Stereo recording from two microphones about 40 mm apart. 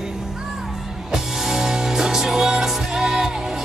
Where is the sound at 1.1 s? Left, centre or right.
Centre.